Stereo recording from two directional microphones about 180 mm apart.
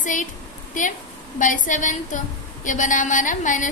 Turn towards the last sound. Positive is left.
turn(degrees=45)  # may be behind; listen again after turning